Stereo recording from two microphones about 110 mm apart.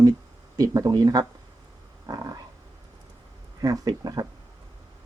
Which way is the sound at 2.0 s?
35° right (ahead or behind).